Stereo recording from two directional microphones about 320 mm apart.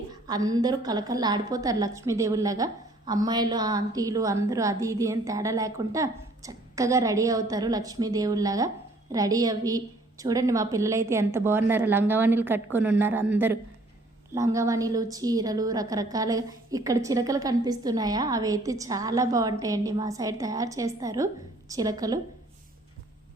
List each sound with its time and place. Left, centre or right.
0.1 s a woman's voice: centre